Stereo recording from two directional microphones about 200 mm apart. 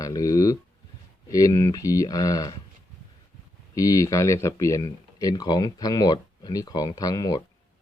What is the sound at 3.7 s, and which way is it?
Speech, 15° left (ahead or behind).